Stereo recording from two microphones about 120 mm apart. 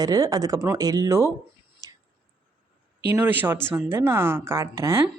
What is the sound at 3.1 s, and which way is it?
A woman's voice, 15° right (ahead or behind).